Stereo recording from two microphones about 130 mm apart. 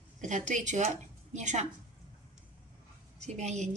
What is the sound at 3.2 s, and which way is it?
Speech, 65° right (ahead or behind).